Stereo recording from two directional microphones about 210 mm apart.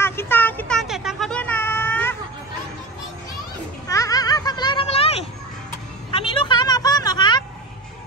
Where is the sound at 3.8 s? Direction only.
15° left (ahead or behind).